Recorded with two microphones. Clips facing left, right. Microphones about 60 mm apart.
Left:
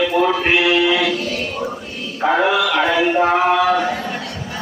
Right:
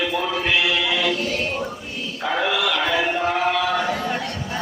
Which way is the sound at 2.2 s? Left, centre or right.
Left.